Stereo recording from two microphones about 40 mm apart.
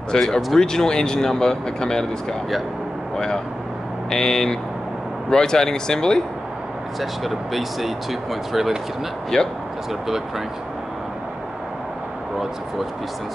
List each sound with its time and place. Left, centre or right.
0.1 s speech: centre
4.1 s speech: centre
7.0 s speech: centre
9.3 s speech: centre